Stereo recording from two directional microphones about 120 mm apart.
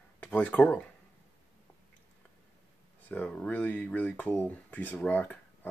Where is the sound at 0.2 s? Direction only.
10° left (ahead or behind).